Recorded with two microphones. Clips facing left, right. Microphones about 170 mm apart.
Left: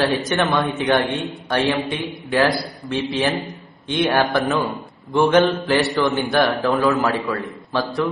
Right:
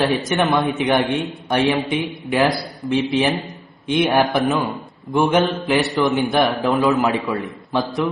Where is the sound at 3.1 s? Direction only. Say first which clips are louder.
Right 2 dB; 20° right (ahead or behind).